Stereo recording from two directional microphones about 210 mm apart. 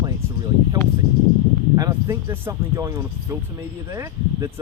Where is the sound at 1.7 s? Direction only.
15° right (ahead or behind).